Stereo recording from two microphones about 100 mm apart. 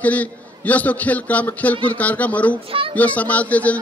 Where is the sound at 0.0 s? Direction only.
15° left (ahead or behind).